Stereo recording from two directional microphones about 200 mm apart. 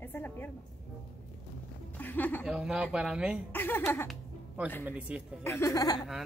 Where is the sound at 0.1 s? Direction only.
10° left (ahead or behind).